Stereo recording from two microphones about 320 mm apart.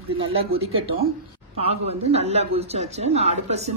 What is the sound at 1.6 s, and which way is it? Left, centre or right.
A man's voice, centre.